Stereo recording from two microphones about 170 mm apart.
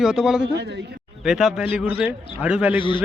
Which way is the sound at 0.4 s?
85° right.